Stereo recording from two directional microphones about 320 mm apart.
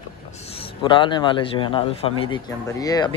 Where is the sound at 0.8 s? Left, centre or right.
Centre.